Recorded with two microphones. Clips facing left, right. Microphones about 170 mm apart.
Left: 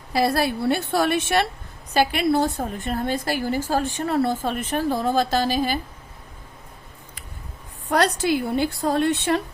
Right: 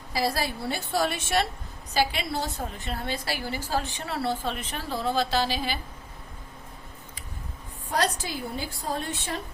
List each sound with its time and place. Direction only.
0.1 s a woman's voice: 60° left (ahead or behind)
7.9 s a woman's voice: 70° left (ahead or behind)